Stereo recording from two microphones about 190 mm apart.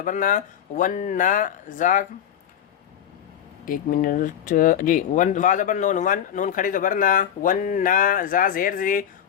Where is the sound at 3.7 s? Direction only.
45° left (ahead or behind).